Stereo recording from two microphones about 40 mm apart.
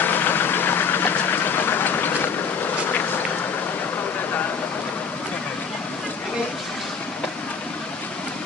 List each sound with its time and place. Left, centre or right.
0.0 s vehicle: left